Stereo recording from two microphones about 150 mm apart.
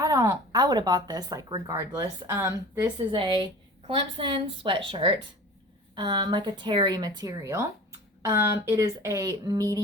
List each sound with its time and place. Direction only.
0.0 s speech: 25° right (ahead or behind)
3.1 s a woman's voice: 35° right (ahead or behind)